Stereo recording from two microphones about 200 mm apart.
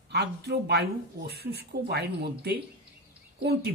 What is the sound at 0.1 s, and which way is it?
Speech, 55° right (ahead or behind).